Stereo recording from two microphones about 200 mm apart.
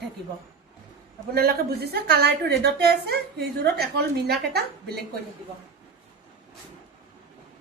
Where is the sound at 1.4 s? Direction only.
50° right (ahead or behind).